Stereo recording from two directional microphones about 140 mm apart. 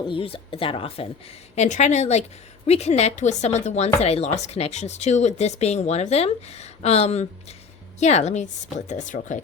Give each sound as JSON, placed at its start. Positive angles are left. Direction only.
{"t": 0.1, "sound": "speech", "side_deg": 40}
{"t": 1.5, "sound": "speech", "side_deg": 55}